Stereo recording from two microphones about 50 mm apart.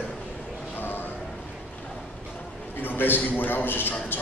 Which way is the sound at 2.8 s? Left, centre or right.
Left.